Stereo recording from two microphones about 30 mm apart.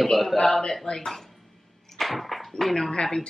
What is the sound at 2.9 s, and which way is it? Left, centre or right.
Speech, left.